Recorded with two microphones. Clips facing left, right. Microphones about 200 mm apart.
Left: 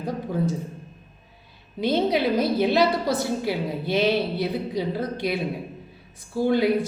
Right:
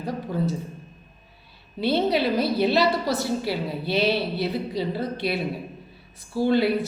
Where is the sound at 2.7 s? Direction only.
50° left (ahead or behind).